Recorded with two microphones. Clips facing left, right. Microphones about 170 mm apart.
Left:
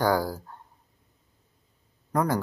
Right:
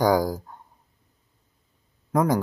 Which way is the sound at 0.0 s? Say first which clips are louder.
Right 4 dB; 15° right (ahead or behind).